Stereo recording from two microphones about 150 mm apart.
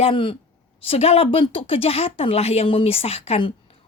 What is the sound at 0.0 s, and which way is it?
Speech, 35° left (ahead or behind).